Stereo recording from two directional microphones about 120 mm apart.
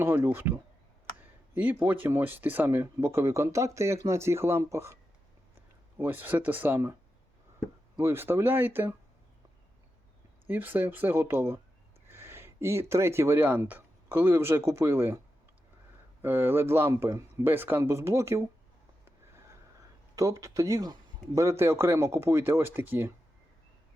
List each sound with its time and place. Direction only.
0.0 s speech: 15° right (ahead or behind)
6.0 s speech: 15° right (ahead or behind)
7.9 s speech: 20° right (ahead or behind)
10.4 s speech: 15° right (ahead or behind)
16.2 s speech: 15° right (ahead or behind)
20.1 s speech: 25° right (ahead or behind)